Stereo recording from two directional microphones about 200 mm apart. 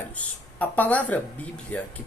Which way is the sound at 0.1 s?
10° left (ahead or behind).